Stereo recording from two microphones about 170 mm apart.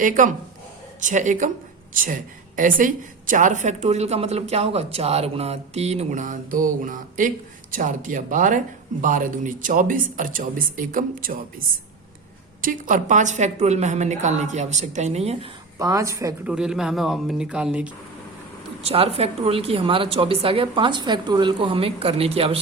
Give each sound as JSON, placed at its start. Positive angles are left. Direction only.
{"t": 0.0, "sound": "a woman's voice", "side_deg": -50}
{"t": 12.6, "sound": "a woman's voice", "side_deg": -50}
{"t": 15.8, "sound": "a woman's voice", "side_deg": -20}
{"t": 16.5, "sound": "speech", "side_deg": -5}
{"t": 18.8, "sound": "a woman's voice", "side_deg": -35}